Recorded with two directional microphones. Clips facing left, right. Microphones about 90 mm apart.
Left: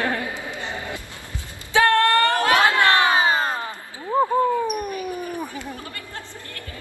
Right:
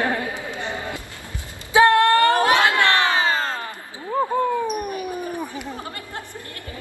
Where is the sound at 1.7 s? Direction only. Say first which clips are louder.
Right 3 dB; 15° right (ahead or behind).